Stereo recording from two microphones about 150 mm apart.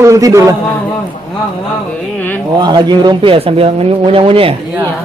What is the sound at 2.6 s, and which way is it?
Speech, 30° right (ahead or behind).